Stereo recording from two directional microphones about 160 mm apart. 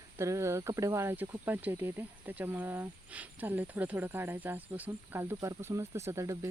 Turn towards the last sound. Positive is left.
turn(degrees=-20)  # may be behind; listen again after turning